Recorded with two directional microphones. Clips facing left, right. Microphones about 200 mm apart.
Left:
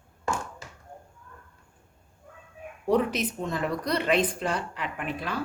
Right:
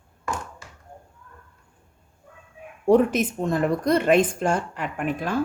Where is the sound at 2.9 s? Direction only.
50° right (ahead or behind).